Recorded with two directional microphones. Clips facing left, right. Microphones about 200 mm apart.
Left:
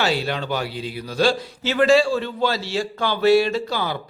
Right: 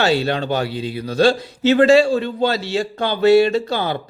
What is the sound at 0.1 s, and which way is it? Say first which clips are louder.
Speech: right 5 dB; 25° right (ahead or behind).